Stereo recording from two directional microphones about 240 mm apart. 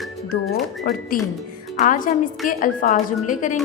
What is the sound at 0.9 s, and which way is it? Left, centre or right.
A woman's voice, left.